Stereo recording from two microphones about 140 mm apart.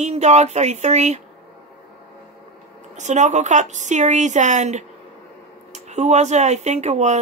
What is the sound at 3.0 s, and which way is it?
A woman's voice, 60° right (ahead or behind).